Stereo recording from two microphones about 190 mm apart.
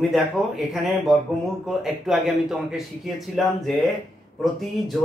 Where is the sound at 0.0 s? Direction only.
Centre (ahead or behind).